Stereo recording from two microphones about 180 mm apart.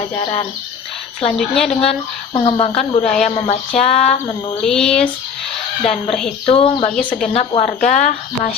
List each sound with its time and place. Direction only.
1.4 s speech: centre (ahead or behind)
1.8 s speech: 35° left (ahead or behind)
4.6 s speech: 5° left (ahead or behind)
6.4 s speech: 30° left (ahead or behind)
6.9 s speech: 5° left (ahead or behind)
7.3 s speech: 35° left (ahead or behind)